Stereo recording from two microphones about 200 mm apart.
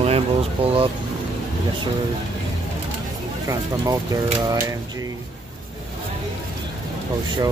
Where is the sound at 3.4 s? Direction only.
15° right (ahead or behind).